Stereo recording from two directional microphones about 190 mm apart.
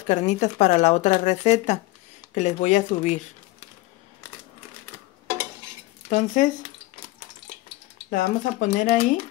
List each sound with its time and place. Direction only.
0.1 s speech: 40° left (ahead or behind)
6.0 s a sound: 40° left (ahead or behind)
8.1 s speech: 40° left (ahead or behind)